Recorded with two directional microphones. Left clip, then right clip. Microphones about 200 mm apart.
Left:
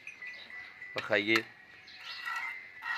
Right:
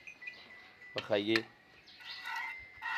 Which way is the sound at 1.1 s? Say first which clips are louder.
Left 3 dB; 15° right (ahead or behind).